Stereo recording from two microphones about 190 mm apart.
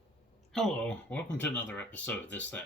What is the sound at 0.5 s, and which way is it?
Speech, 5° left (ahead or behind).